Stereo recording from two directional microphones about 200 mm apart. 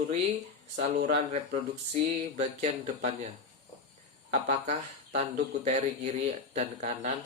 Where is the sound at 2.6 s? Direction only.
35° right (ahead or behind).